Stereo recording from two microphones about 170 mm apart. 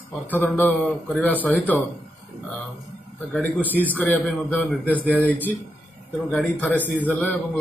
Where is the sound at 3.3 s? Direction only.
10° left (ahead or behind).